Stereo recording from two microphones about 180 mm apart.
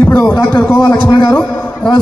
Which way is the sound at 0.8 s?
25° left (ahead or behind).